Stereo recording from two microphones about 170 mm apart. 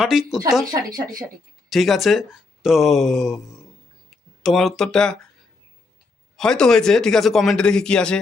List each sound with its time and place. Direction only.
0.0 s speech: centre (ahead or behind)
0.7 s speech: 20° right (ahead or behind)
1.7 s speech: centre (ahead or behind)
6.3 s speech: 5° left (ahead or behind)